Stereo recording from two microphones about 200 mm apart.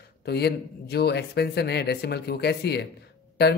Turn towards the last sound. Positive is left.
turn(degrees=55)  # may be behind; listen again after turning